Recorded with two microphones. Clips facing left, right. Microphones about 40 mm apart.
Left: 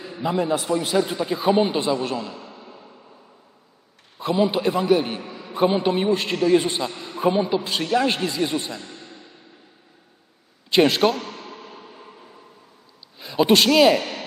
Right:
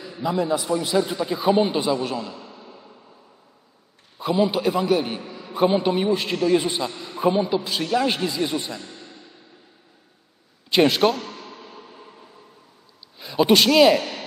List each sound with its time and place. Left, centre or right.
0.0 s a sound: left
0.7 s a man's voice: left
0.9 s a man's voice: centre
2.0 s a man's voice: centre
2.6 s fireworks: centre
4.2 s a man's voice: centre
6.9 s a sound: centre
7.2 s a man's voice: centre
8.8 s a sound: left
10.7 s a man's voice: centre
11.2 s a sound: centre
13.7 s a man's voice: centre
14.0 s a man's voice: left